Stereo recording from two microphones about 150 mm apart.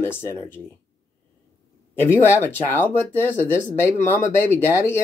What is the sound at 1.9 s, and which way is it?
Speech, 15° left (ahead or behind).